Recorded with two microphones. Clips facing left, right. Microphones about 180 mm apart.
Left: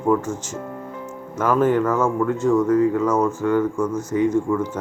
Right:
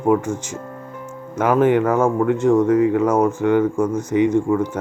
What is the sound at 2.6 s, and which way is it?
Speech, 90° right.